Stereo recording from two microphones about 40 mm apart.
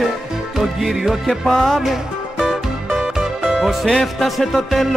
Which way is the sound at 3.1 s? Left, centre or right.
Centre.